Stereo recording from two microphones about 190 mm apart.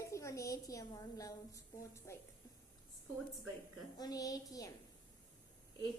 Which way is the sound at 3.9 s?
20° left (ahead or behind).